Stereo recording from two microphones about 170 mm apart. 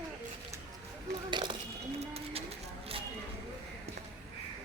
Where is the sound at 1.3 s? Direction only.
25° right (ahead or behind).